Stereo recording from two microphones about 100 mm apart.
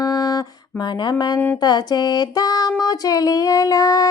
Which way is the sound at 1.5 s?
45° left (ahead or behind).